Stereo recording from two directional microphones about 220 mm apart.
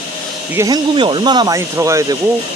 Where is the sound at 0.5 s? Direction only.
15° right (ahead or behind).